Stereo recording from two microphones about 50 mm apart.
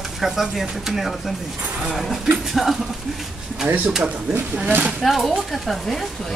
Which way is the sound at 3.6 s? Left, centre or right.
Right.